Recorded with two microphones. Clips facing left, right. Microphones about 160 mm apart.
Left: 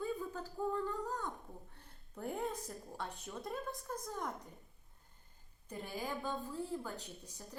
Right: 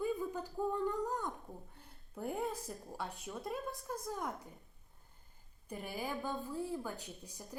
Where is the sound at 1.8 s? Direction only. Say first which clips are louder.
Right 2 dB; 5° right (ahead or behind).